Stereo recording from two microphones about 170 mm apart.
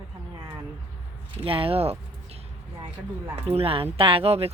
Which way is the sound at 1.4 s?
35° right (ahead or behind).